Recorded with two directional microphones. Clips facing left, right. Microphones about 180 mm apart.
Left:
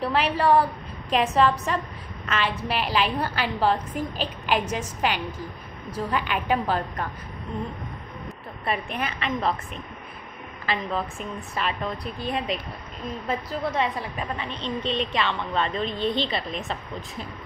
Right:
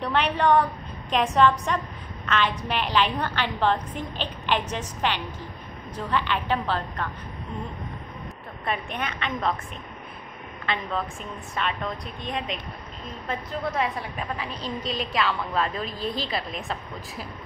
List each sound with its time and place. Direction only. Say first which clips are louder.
0.0 s a woman's voice: left 1 dB; 5° left (ahead or behind)
8.6 s a woman's voice: left 1 dB; 5° left (ahead or behind)
10.6 s a woman's voice: left 1 dB; 5° left (ahead or behind)
13.7 s a woman's voice: left 1 dB; centre (ahead or behind)